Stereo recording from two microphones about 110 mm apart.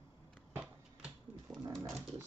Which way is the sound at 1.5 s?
30° right (ahead or behind).